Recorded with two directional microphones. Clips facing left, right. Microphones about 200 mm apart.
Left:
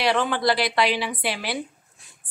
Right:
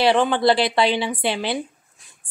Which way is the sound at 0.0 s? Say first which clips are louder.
Right 5 dB; 25° right (ahead or behind).